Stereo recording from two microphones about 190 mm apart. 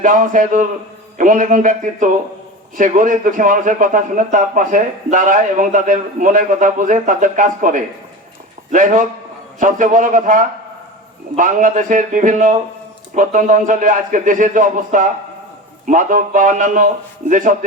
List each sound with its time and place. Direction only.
0.0 s a man's voice: 45° right (ahead or behind)